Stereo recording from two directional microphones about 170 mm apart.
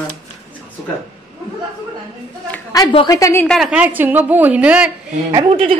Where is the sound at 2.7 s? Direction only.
25° left (ahead or behind).